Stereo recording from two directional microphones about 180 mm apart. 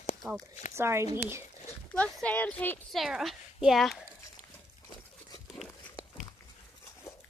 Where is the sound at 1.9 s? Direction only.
5° left (ahead or behind).